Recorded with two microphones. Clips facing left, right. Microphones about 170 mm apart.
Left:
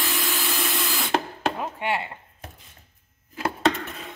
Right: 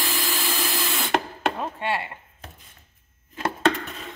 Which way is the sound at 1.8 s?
20° left (ahead or behind).